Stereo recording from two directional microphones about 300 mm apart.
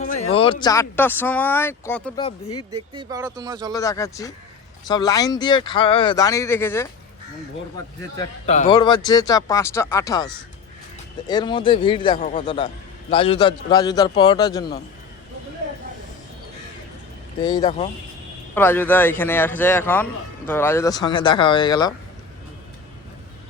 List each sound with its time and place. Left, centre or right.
0.3 s a man's voice: centre
2.9 s speech: centre
3.8 s a man's voice: centre
8.4 s a man's voice: left
17.4 s a man's voice: centre